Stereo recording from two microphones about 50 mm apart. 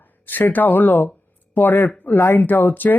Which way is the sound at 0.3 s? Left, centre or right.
Left.